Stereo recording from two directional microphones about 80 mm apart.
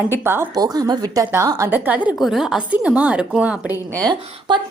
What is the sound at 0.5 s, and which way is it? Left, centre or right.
A woman's voice, right.